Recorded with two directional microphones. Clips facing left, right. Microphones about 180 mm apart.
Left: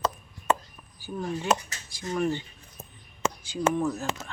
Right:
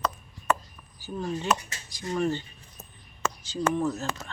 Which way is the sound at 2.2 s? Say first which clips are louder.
Even; 10° left (ahead or behind).